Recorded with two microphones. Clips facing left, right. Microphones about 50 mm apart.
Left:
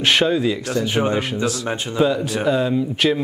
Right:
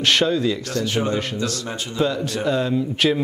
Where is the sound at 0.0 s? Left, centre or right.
Centre.